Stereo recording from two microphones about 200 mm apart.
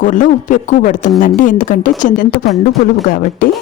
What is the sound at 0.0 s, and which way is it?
Speech, 40° left (ahead or behind).